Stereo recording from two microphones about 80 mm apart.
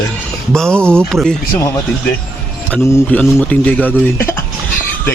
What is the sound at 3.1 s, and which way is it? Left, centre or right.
Speech, centre.